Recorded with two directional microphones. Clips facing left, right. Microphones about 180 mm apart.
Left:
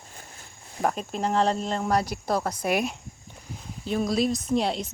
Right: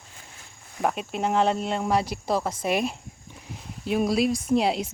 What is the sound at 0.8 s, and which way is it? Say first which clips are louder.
Speech: right 1 dB; 5° right (ahead or behind).